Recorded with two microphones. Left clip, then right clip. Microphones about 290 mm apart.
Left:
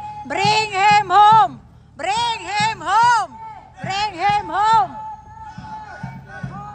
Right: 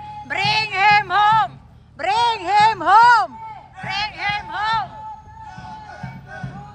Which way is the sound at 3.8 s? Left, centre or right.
Centre.